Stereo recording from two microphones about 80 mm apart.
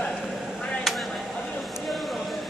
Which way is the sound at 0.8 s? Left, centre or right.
Centre.